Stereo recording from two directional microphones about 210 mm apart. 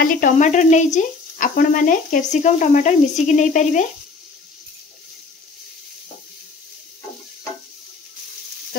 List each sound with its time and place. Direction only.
0.0 s speech: 40° left (ahead or behind)